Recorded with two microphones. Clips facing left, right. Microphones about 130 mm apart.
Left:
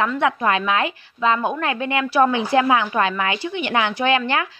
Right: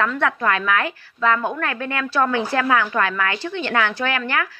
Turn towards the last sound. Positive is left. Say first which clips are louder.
# left 4 dB
turn(degrees=20)  # may be behind; listen again after turning